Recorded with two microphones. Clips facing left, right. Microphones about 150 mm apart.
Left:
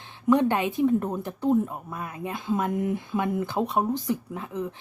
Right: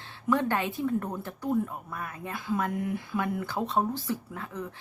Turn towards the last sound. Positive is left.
turn(degrees=20)  # may be behind; listen again after turning